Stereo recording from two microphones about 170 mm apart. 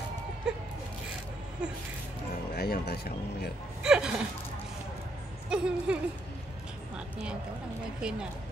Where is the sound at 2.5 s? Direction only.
65° left (ahead or behind).